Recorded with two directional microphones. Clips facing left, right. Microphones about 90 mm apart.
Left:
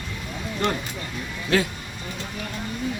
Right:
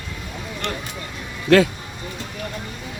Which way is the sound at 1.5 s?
65° right (ahead or behind).